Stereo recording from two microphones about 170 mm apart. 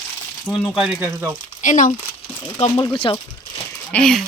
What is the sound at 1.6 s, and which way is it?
Speech, 50° left (ahead or behind).